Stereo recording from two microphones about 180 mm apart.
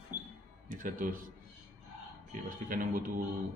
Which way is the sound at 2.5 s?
50° right (ahead or behind).